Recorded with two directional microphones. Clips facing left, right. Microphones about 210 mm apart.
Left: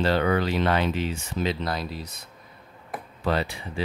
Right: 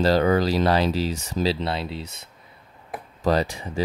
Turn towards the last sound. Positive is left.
turn(degrees=-40)  # may be behind; listen again after turning